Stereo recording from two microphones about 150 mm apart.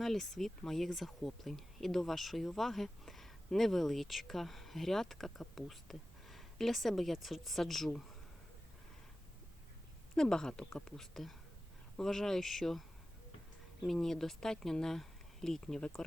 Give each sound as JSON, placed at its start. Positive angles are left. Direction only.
{"t": 0.0, "sound": "speech", "side_deg": 0}
{"t": 10.2, "sound": "speech", "side_deg": 5}
{"t": 13.8, "sound": "speech", "side_deg": 0}